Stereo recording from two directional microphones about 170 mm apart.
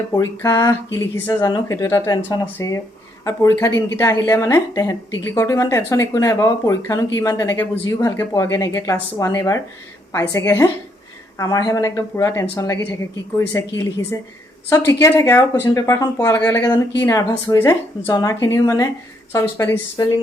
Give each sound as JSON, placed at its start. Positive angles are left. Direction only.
{"t": 0.2, "sound": "a woman's voice", "side_deg": 20}